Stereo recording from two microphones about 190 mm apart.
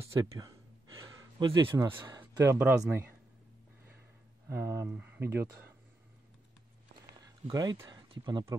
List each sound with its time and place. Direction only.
0.0 s speech: 15° right (ahead or behind)
4.5 s speech: 15° right (ahead or behind)
7.2 s speech: 20° right (ahead or behind)